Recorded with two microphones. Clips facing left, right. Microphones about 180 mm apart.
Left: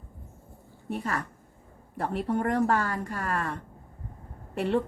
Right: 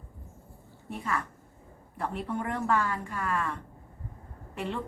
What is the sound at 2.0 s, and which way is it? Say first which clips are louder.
A woman's voice: left 5 dB; 40° left (ahead or behind).